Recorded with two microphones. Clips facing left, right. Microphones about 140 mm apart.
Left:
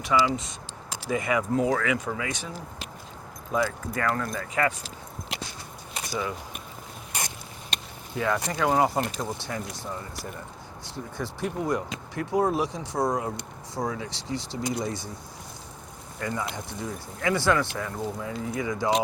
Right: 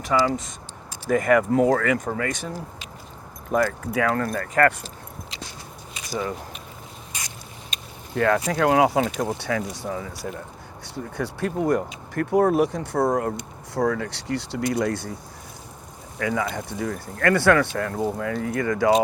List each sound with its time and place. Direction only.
0.0 s speech: 45° right (ahead or behind)
3.5 s speech: 65° right (ahead or behind)
6.1 s speech: 40° right (ahead or behind)
7.1 s a sound: 60° left (ahead or behind)
8.1 s speech: 65° right (ahead or behind); by 9.6 s 90° right
9.8 s speech: 75° right (ahead or behind)
10.8 s speech: 65° right (ahead or behind)
16.1 s speech: 80° right; by 18.9 s 65° right (ahead or behind)